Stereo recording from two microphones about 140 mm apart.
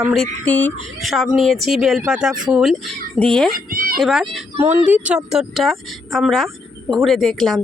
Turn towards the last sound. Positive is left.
turn(degrees=0)  # may be behind; listen again after turning